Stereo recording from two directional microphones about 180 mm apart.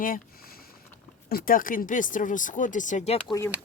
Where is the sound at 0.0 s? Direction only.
55° left (ahead or behind).